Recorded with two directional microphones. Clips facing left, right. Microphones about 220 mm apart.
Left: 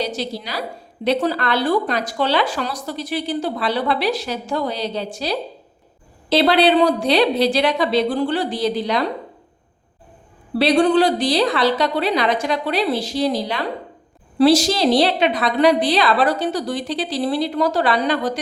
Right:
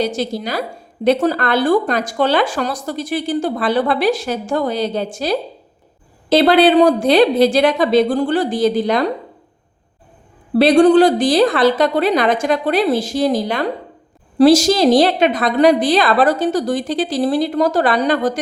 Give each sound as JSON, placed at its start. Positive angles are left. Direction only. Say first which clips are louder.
{"t": 0.0, "sound": "speech", "louder": "right 5 dB", "side_deg": -50}
{"t": 10.5, "sound": "speech", "louder": "right 5 dB", "side_deg": -45}